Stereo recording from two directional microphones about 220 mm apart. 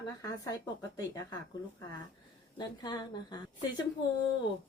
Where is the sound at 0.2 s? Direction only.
15° left (ahead or behind).